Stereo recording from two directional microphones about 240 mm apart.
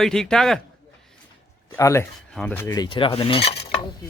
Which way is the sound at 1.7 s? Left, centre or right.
Centre.